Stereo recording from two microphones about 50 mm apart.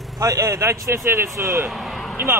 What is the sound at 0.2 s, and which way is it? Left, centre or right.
A man's voice, right.